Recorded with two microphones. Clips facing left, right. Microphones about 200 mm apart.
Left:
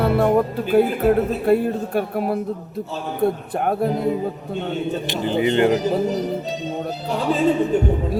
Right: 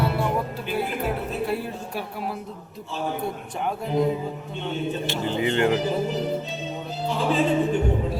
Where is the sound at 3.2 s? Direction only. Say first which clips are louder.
Left 8 dB; 60° left (ahead or behind).